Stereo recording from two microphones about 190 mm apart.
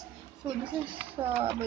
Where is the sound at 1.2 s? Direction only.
20° right (ahead or behind).